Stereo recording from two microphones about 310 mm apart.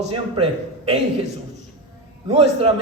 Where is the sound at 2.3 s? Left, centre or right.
Centre.